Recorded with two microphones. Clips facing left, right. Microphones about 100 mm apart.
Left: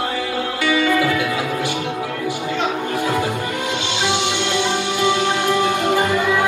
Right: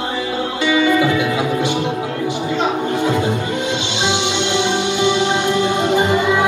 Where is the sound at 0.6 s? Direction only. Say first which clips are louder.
Right 3 dB; 20° right (ahead or behind).